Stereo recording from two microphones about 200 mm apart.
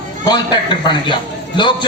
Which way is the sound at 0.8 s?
25° left (ahead or behind).